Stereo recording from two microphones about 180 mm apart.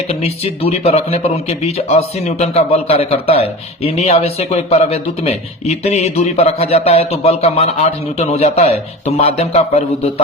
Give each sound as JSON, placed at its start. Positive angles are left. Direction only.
{"t": 0.1, "sound": "speech", "side_deg": 35}